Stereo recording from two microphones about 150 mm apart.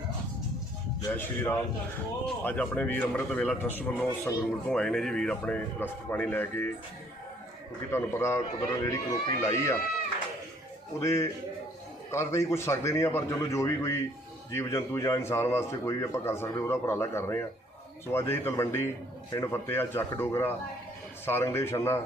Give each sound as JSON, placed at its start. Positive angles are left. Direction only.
{"t": 1.1, "sound": "a man's voice", "side_deg": 15}
{"t": 7.9, "sound": "a man's voice", "side_deg": 15}
{"t": 11.0, "sound": "a man's voice", "side_deg": 20}